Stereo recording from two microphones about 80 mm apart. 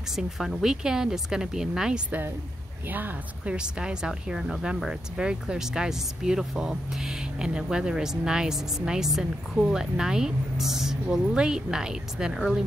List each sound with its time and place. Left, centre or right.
0.1 s speech: centre
2.9 s speech: right
3.5 s speech: centre